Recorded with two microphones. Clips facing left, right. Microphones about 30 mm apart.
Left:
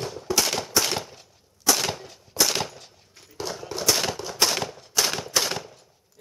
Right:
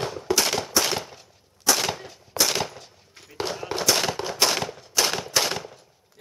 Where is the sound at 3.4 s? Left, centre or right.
Right.